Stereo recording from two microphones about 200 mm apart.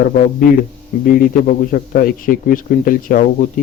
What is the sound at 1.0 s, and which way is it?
A man's voice, 45° left (ahead or behind).